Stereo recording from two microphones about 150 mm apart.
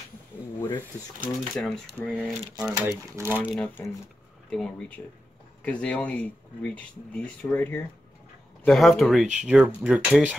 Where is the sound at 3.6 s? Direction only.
15° left (ahead or behind).